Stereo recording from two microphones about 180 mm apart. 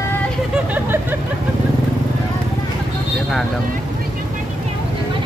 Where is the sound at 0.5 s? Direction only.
10° right (ahead or behind).